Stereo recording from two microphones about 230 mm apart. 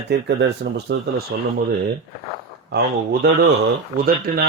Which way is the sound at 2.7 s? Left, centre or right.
Right.